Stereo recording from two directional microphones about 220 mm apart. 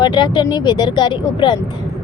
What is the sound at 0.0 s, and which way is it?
A woman's voice, 20° left (ahead or behind).